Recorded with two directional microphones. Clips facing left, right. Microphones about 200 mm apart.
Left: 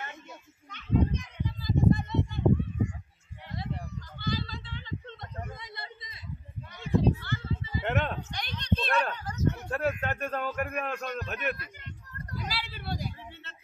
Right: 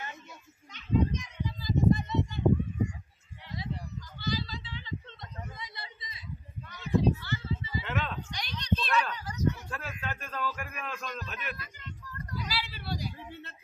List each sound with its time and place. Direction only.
0.7 s children playing: 55° left (ahead or behind)
3.5 s a sound: 55° left (ahead or behind)
12.4 s vehicle: 50° left (ahead or behind)